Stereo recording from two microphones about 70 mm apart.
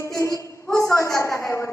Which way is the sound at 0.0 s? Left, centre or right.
Left.